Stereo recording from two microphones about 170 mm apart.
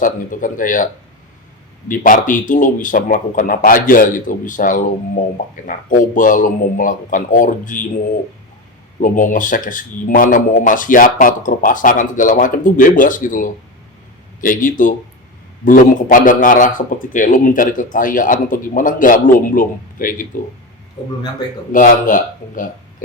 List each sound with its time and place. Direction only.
0.0 s a man's voice: 50° left (ahead or behind)
1.9 s a man's voice: 50° left (ahead or behind)
9.0 s a man's voice: 50° left (ahead or behind)
21.7 s a man's voice: 50° left (ahead or behind)